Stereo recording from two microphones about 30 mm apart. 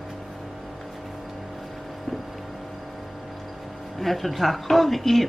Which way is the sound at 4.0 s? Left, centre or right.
Centre.